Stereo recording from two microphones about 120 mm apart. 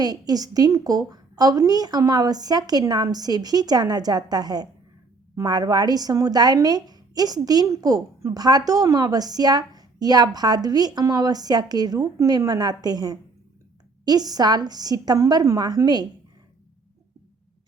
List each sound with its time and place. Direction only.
0.0 s a woman's voice: 30° right (ahead or behind)